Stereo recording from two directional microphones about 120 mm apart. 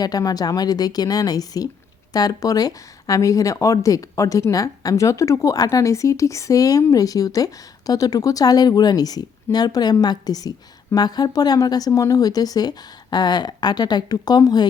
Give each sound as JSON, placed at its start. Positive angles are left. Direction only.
{"t": 0.0, "sound": "speech", "side_deg": 30}